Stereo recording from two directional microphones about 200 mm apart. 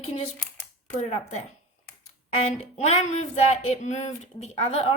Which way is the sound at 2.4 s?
30° left (ahead or behind).